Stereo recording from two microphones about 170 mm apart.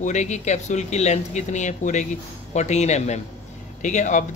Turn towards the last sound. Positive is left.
turn(degrees=45)  # may be behind; listen again after turning